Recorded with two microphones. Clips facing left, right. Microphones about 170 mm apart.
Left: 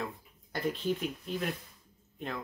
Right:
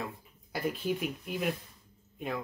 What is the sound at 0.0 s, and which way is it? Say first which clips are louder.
Speech: left 1 dB; 5° right (ahead or behind).